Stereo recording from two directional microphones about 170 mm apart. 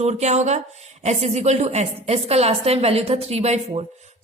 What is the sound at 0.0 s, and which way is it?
A woman's voice, 40° right (ahead or behind).